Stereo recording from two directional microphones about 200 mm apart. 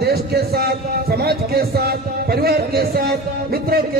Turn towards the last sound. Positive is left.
turn(degrees=-50)  # may be behind; listen again after turning